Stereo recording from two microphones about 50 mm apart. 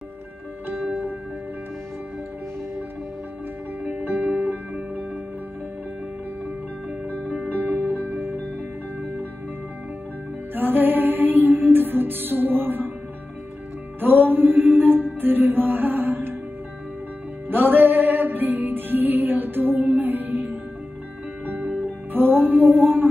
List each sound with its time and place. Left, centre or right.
3.8 s music: right
7.4 s music: right
10.5 s music: right
14.0 s mantra: right
17.5 s music: right
21.5 s music: right